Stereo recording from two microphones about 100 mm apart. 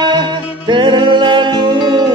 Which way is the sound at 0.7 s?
50° right (ahead or behind).